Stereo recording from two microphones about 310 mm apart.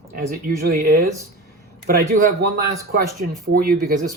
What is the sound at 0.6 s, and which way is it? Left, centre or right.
Speech, right.